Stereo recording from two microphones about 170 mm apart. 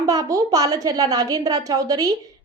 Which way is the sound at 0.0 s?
20° right (ahead or behind).